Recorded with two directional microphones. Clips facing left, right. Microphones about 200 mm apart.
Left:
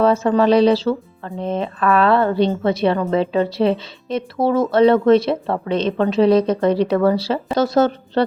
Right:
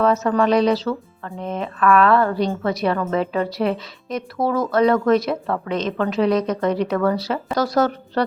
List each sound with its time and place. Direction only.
0.0 s speech: 30° left (ahead or behind)